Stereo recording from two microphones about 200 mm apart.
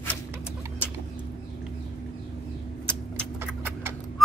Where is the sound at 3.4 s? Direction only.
10° right (ahead or behind).